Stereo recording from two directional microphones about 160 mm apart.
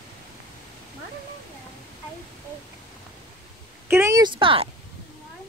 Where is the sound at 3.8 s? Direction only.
15° right (ahead or behind).